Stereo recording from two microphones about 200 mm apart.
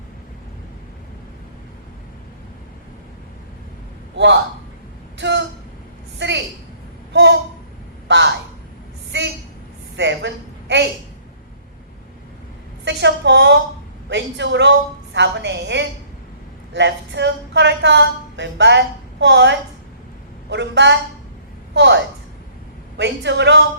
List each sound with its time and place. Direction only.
5.1 s a sound: 60° right (ahead or behind)
6.1 s a woman's voice: 60° right (ahead or behind)
7.1 s a sound: 60° right (ahead or behind)
8.0 s speech: 60° right (ahead or behind)
10.0 s a woman's voice: 60° right (ahead or behind)
12.8 s speech: 60° right (ahead or behind)